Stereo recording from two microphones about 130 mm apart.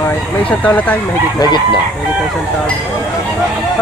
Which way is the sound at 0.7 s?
10° left (ahead or behind).